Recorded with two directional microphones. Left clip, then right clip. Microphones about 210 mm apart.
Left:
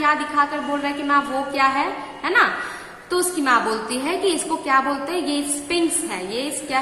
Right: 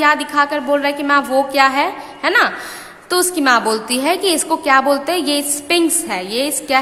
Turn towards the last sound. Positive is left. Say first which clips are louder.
# right 7 dB
turn(degrees=-50)  # may be behind; listen again after turning